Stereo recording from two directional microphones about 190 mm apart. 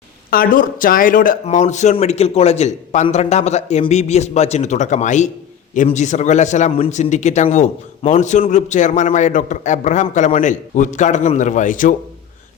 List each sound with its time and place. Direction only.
0.3 s a man's voice: 50° left (ahead or behind)